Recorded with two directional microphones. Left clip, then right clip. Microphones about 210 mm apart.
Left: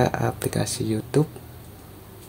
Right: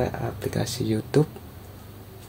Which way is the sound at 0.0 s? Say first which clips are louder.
Left 5 dB; 20° left (ahead or behind).